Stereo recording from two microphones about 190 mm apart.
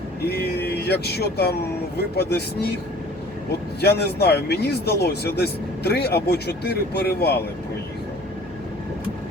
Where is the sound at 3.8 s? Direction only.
60° left (ahead or behind).